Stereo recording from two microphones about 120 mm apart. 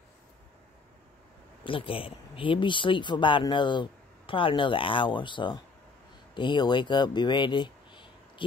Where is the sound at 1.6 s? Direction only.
45° left (ahead or behind).